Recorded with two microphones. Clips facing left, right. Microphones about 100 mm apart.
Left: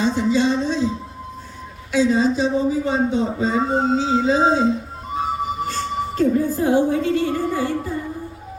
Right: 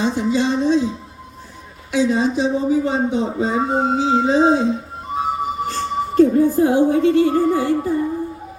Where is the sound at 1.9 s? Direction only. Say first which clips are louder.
Even; 15° right (ahead or behind).